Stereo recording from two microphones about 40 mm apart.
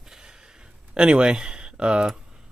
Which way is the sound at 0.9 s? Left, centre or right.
Right.